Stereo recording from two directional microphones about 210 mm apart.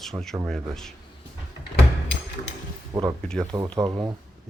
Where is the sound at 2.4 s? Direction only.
30° left (ahead or behind).